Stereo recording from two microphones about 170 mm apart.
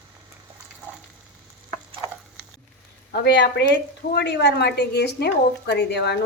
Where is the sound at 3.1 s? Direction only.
75° left (ahead or behind).